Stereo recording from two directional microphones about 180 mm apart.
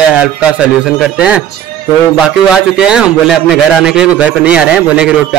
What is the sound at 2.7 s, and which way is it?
A man's voice, 5° right (ahead or behind).